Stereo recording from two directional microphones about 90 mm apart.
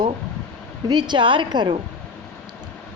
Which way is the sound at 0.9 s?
55° right (ahead or behind).